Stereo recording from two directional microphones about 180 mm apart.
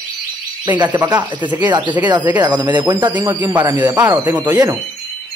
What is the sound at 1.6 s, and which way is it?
Speech, 25° right (ahead or behind).